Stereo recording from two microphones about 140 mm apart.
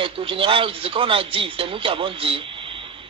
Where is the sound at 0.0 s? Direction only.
40° right (ahead or behind).